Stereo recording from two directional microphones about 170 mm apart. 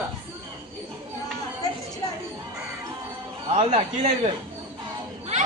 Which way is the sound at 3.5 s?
40° right (ahead or behind).